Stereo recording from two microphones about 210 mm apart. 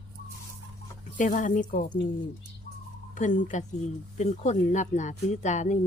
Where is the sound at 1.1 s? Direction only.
40° left (ahead or behind).